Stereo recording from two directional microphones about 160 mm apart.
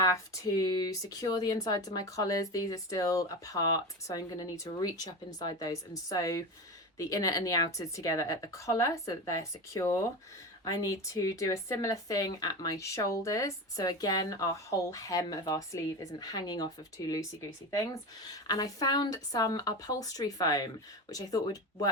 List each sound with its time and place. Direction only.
0.0 s speech: 20° left (ahead or behind)